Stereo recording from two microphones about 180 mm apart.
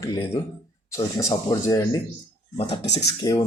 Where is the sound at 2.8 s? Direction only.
75° left (ahead or behind).